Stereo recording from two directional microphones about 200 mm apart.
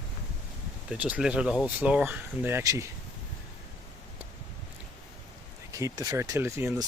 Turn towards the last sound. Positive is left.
turn(degrees=-10)  # may be behind; listen again after turning